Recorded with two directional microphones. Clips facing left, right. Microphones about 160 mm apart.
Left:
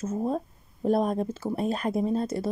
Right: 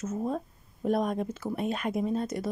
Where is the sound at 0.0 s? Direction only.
30° left (ahead or behind).